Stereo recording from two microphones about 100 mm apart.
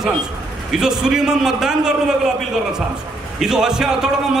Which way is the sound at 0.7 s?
5° right (ahead or behind).